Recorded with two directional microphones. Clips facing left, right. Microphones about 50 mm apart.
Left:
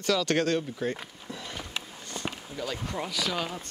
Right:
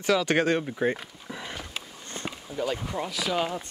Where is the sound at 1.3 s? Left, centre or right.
Right.